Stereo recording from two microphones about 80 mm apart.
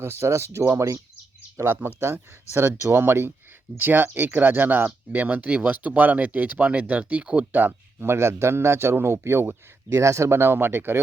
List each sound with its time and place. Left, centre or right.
0.0 s a man's voice: right
1.5 s a man's voice: right
7.7 s a man's voice: right